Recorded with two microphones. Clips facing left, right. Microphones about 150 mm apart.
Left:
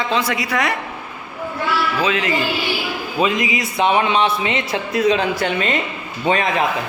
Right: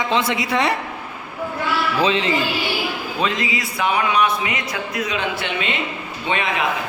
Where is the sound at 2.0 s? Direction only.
30° right (ahead or behind).